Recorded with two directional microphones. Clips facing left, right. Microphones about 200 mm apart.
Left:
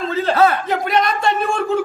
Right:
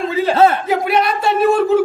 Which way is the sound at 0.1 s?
10° right (ahead or behind).